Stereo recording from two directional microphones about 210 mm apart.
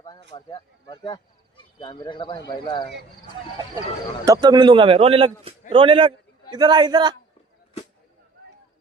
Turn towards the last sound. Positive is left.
turn(degrees=-20)  # may be behind; listen again after turning